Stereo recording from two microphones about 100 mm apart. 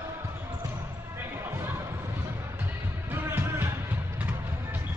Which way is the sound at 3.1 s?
25° right (ahead or behind).